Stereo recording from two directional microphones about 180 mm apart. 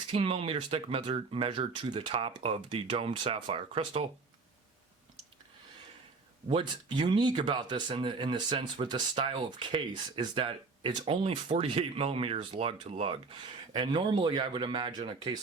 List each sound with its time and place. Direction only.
0.1 s speech: 30° right (ahead or behind)
6.5 s speech: 25° right (ahead or behind)